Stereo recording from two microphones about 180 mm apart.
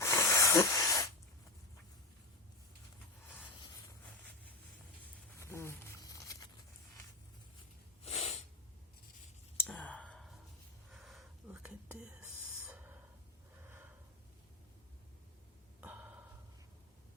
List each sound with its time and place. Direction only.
0.0 s hiss: 15° left (ahead or behind)
5.4 s a sound: 15° left (ahead or behind)
8.0 s sneeze: 35° left (ahead or behind)
9.6 s sigh: 10° left (ahead or behind)
10.9 s whispering: centre (ahead or behind)
13.7 s snort: 10° right (ahead or behind)
15.8 s a sound: 10° right (ahead or behind)